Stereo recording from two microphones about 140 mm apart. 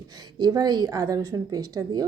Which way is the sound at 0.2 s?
30° right (ahead or behind).